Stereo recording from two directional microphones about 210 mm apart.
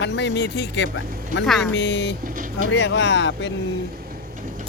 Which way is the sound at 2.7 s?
55° left (ahead or behind).